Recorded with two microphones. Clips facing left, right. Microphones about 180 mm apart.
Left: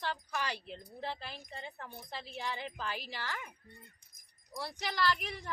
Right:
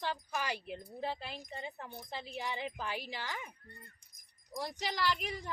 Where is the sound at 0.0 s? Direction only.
15° right (ahead or behind).